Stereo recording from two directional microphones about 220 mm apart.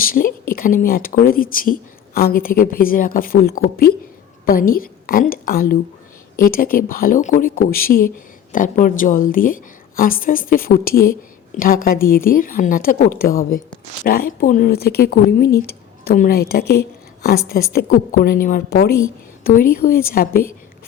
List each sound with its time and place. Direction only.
0.0 s a woman's voice: 40° left (ahead or behind)